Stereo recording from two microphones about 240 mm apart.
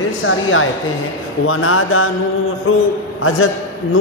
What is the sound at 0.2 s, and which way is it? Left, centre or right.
A man's voice, left.